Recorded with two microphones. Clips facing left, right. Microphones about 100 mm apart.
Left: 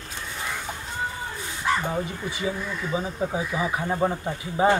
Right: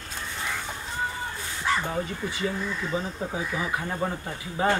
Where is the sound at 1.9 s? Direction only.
10° left (ahead or behind).